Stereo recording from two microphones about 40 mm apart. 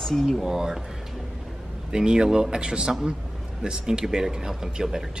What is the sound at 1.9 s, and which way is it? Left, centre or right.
Speech, centre.